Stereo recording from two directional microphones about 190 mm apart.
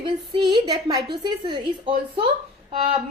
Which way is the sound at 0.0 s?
20° right (ahead or behind).